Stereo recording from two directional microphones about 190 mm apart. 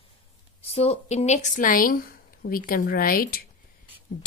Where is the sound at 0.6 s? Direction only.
30° left (ahead or behind).